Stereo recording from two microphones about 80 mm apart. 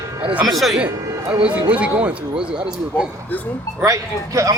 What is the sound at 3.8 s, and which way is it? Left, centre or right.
Speech, right.